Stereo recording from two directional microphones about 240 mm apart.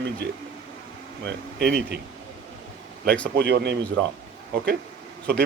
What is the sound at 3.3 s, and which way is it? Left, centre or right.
Speech, right.